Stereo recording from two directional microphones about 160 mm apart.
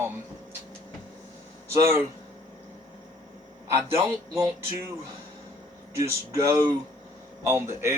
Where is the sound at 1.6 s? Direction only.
15° right (ahead or behind).